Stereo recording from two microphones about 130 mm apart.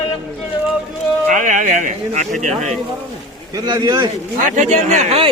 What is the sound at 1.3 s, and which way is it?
Speech, 80° right.